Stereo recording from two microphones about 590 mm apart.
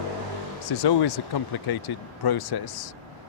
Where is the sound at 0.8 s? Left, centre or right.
Left.